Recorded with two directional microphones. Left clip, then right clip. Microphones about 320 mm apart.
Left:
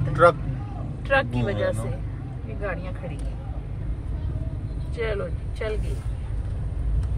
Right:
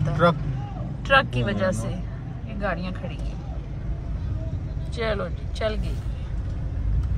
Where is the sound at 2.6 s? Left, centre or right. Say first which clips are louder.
Right 3 dB; centre.